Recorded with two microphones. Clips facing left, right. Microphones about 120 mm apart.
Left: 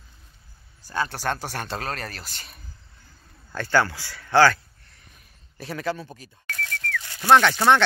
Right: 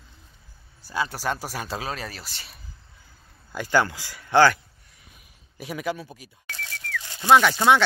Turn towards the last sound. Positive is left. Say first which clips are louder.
# even
turn(degrees=-10)  # may be behind; listen again after turning